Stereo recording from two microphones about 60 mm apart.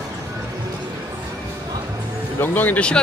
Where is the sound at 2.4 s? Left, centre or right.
Left.